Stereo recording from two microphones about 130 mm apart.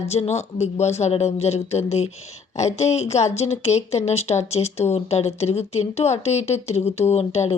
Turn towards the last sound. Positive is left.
turn(degrees=50)  # may be behind; listen again after turning